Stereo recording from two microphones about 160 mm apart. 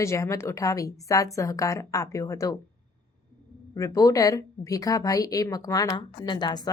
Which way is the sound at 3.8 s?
20° left (ahead or behind).